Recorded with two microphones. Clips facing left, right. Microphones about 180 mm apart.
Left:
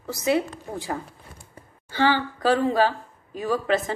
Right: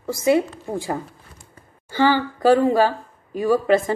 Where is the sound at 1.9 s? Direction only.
45° right (ahead or behind).